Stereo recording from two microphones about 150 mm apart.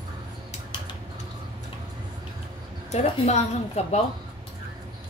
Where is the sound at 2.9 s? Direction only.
50° left (ahead or behind).